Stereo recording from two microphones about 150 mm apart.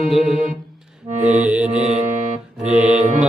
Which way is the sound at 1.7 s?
50° right (ahead or behind).